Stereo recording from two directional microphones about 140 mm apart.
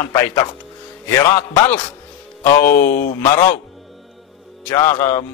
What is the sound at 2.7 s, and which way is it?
Speech, 90° left.